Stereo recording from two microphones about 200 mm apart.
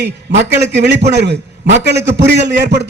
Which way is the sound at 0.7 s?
60° right (ahead or behind).